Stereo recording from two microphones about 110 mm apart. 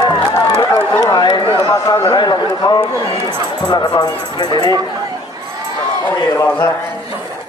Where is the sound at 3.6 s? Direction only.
40° left (ahead or behind).